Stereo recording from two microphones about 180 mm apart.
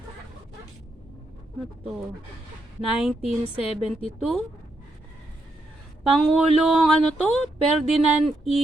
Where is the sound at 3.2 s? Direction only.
30° left (ahead or behind).